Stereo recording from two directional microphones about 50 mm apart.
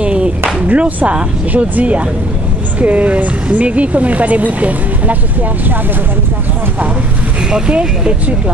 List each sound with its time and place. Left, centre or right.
0.0 s a sound: right
0.7 s speech: right
7.5 s speech: centre